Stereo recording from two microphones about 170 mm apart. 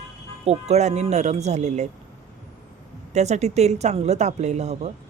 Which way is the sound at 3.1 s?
40° right (ahead or behind).